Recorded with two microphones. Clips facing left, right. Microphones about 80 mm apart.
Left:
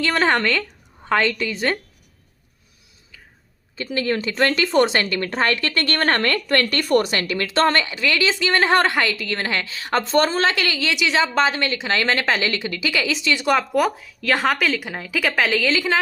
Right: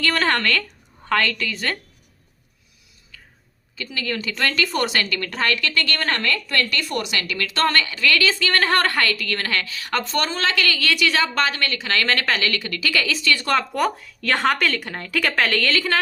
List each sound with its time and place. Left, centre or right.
0.0 s a woman's voice: centre
3.9 s a woman's voice: left; by 16.0 s centre